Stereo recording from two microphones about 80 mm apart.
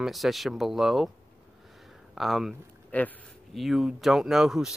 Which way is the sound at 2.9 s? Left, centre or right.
Centre.